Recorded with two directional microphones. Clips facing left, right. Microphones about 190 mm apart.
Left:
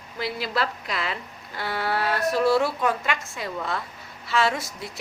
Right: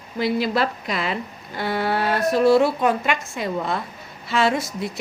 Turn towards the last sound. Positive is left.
turn(degrees=-20)  # may be behind; listen again after turning